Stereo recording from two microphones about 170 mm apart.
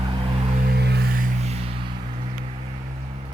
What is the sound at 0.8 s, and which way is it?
Music, 75° right (ahead or behind).